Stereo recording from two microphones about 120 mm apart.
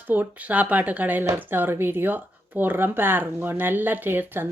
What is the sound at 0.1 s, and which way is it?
A woman's voice, 15° right (ahead or behind).